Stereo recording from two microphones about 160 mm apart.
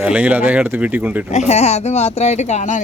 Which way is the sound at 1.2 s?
45° left (ahead or behind).